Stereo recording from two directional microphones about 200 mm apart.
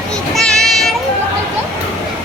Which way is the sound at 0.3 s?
Centre (ahead or behind).